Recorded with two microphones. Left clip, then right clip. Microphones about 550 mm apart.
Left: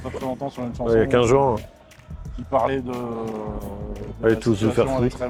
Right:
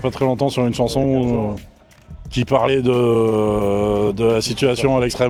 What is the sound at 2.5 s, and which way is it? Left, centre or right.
Speech, right.